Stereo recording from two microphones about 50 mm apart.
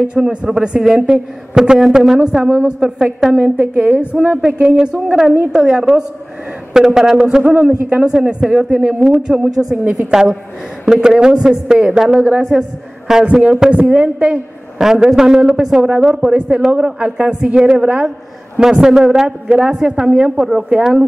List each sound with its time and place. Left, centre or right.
0.1 s a woman's voice: centre
3.5 s a woman's voice: right
5.5 s a woman's voice: right
7.5 s speech: right
8.0 s a woman's voice: centre
14.8 s a woman's voice: centre